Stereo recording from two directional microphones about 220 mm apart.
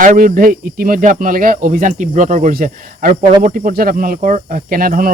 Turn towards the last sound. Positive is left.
turn(degrees=-40)  # may be behind; listen again after turning